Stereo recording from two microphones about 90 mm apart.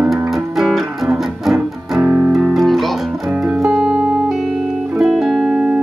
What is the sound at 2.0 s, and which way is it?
Music, 20° right (ahead or behind).